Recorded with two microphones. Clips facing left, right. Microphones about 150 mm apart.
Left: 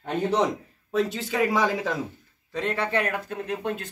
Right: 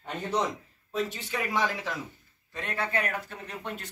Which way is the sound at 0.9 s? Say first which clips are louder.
Left 6 dB; 90° left.